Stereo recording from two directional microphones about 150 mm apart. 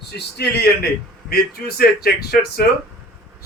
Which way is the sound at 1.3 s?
90° left.